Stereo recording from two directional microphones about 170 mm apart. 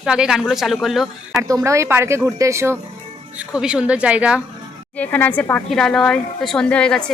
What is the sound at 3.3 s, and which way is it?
Speech, 5° right (ahead or behind).